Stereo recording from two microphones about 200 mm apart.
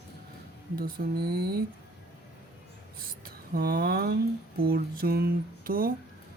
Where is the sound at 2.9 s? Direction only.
45° right (ahead or behind).